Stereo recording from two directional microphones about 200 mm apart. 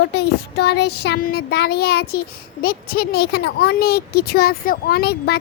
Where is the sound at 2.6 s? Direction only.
50° left (ahead or behind).